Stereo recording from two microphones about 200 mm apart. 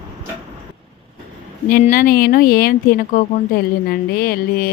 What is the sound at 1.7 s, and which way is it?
Speech, 45° left (ahead or behind).